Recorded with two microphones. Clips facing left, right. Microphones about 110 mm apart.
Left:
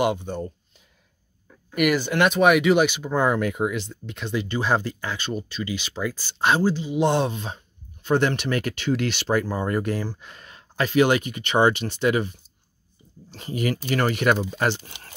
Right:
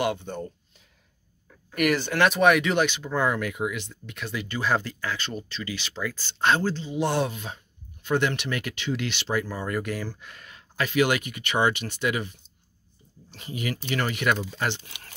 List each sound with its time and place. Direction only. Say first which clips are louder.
0.0 s speech: left 4 dB; 20° left (ahead or behind)
1.7 s speech: left 3 dB; 5° left (ahead or behind); by 9.5 s 45° left (ahead or behind)
9.5 s speech: left 5 dB; 30° left (ahead or behind)